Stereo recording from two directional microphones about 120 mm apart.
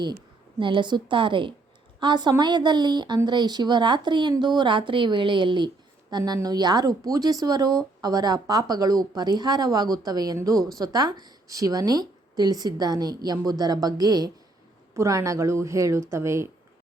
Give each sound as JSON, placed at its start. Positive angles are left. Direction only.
{"t": 0.6, "sound": "a woman's voice", "side_deg": -45}